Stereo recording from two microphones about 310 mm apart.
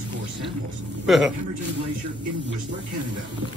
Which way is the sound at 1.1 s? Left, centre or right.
Centre.